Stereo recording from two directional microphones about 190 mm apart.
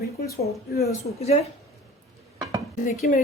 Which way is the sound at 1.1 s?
35° left (ahead or behind).